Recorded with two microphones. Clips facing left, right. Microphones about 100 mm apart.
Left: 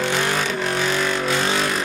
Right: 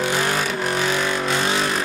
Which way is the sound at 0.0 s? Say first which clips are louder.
Even; 5° right (ahead or behind).